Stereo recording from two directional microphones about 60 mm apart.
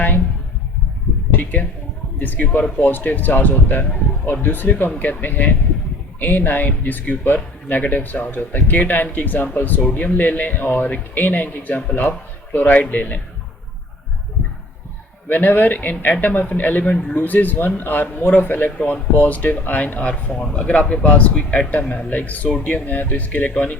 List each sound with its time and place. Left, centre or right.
1.4 s speech: left
15.3 s speech: left
17.2 s speech: left
20.3 s speech: centre
20.6 s speech: left
22.4 s speech: centre